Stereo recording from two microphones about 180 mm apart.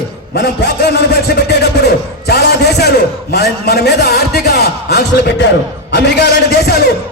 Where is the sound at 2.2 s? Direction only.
65° left (ahead or behind).